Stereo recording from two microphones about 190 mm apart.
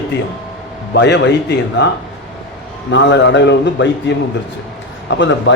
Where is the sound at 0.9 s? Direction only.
65° left (ahead or behind).